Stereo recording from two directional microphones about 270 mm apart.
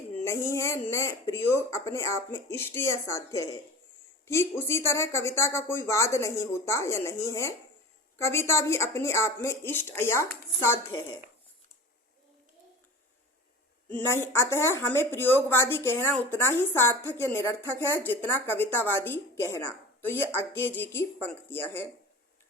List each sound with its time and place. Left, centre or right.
0.3 s a woman's voice: centre
13.9 s a woman's voice: centre